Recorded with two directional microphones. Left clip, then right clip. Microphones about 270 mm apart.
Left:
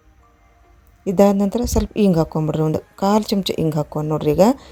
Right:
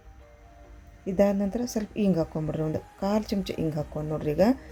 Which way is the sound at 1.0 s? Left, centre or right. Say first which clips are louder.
Left 9 dB; left.